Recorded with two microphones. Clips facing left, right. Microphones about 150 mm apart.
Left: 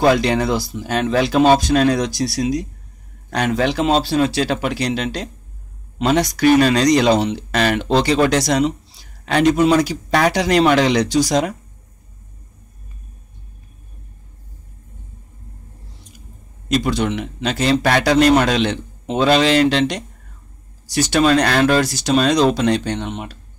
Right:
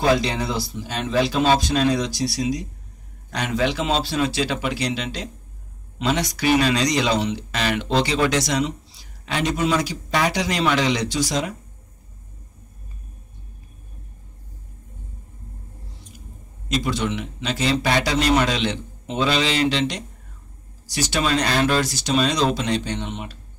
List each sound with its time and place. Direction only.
0.0 s a man's voice: 65° left (ahead or behind); by 8.7 s 40° left (ahead or behind)
9.2 s a man's voice: 55° left (ahead or behind); by 11.4 s 40° left (ahead or behind)
16.7 s a man's voice: 55° left (ahead or behind)